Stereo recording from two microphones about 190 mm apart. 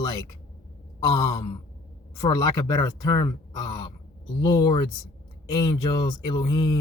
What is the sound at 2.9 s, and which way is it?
Speech, 20° left (ahead or behind).